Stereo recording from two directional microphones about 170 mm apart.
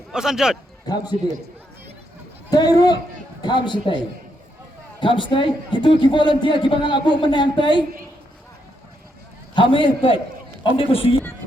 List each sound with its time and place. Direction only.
0.1 s speech: 5° right (ahead or behind)
0.9 s a man's voice: 25° left (ahead or behind)
2.5 s a man's voice: 20° left (ahead or behind)
4.9 s a man's voice: 30° left (ahead or behind)
9.6 s a man's voice: 30° left (ahead or behind)